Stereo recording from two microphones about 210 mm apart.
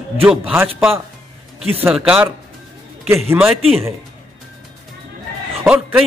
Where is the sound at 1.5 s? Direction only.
30° right (ahead or behind).